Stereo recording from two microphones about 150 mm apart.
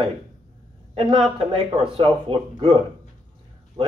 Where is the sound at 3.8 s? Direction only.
40° right (ahead or behind).